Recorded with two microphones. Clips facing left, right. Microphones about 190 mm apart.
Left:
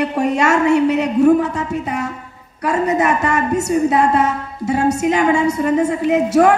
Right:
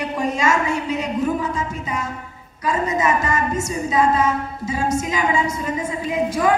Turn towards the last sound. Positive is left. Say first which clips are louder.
# left 7 dB
turn(degrees=70)  # may be behind; listen again after turning